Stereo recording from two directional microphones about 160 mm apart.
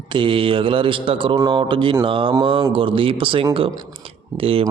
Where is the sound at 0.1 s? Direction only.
30° right (ahead or behind).